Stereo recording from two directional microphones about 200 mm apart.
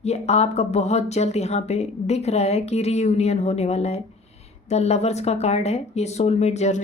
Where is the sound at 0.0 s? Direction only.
35° left (ahead or behind).